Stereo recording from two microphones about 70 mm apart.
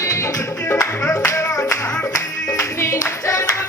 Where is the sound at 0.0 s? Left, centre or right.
Left.